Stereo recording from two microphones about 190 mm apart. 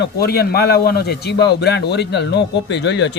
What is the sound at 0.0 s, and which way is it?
Speech, 55° left (ahead or behind).